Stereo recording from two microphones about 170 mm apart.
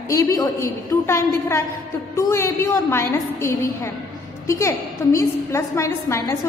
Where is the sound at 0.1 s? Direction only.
20° left (ahead or behind).